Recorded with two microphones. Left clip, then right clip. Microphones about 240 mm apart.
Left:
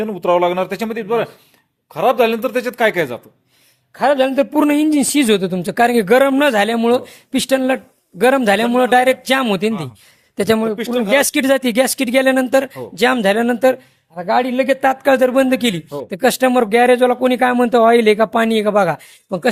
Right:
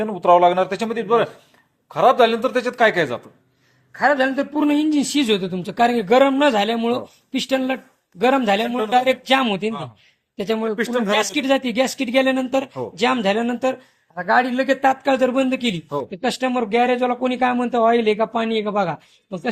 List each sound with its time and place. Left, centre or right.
0.0 s speech: left
3.9 s a man's voice: left
10.8 s speech: centre
11.1 s a man's voice: left